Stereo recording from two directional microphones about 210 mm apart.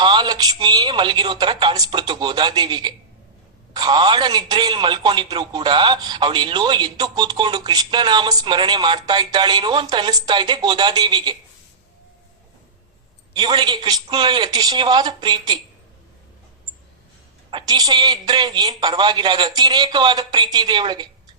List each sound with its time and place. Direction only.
0.0 s speech: 20° right (ahead or behind)
13.3 s speech: 20° right (ahead or behind)
17.5 s speech: 20° right (ahead or behind)